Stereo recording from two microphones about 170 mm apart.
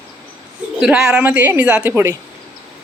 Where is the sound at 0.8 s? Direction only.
5° right (ahead or behind).